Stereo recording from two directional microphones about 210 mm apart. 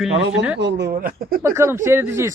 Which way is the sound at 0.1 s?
60° right (ahead or behind).